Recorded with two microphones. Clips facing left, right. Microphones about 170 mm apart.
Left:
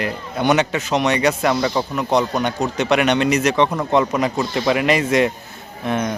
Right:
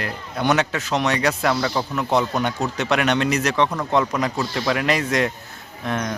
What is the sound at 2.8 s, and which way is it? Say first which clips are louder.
A man's voice: left 4 dB; centre (ahead or behind).